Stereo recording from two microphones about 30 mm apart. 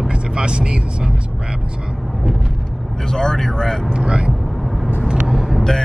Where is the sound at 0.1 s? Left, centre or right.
Right.